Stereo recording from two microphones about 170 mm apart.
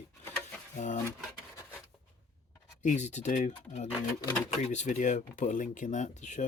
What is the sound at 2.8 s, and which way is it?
Speech, 45° left (ahead or behind).